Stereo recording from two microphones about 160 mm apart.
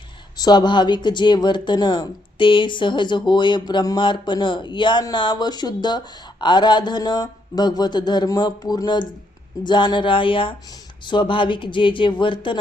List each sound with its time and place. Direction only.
0.3 s speech: 25° left (ahead or behind)